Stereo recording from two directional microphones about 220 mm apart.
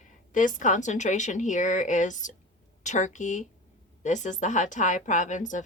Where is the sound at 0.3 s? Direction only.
35° left (ahead or behind).